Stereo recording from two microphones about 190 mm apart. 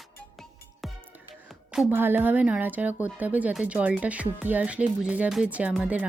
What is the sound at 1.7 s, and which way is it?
Speech, 5° right (ahead or behind).